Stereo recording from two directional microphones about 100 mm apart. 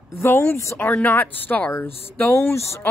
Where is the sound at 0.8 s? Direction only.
15° left (ahead or behind).